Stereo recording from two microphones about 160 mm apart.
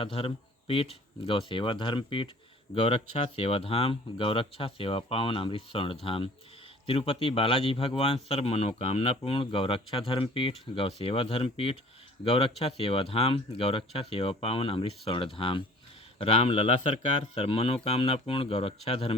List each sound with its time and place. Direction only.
0.0 s speech: 35° left (ahead or behind)